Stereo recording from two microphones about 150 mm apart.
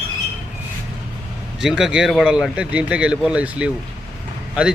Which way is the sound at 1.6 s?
5° right (ahead or behind).